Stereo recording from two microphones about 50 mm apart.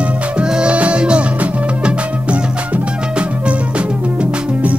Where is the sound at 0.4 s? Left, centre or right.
Centre.